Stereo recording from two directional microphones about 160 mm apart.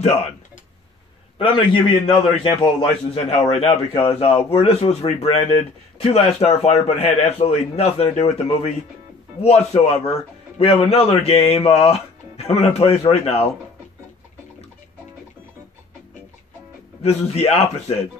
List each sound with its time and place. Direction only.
1.4 s a man's voice: 35° left (ahead or behind)
17.0 s a man's voice: 40° left (ahead or behind)